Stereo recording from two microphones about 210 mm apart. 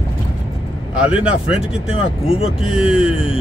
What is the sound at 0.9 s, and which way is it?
Speech, 5° right (ahead or behind).